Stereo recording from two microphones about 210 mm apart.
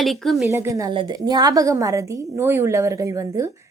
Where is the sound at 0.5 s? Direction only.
15° right (ahead or behind).